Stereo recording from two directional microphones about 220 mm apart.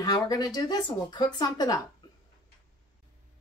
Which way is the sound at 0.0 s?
20° left (ahead or behind).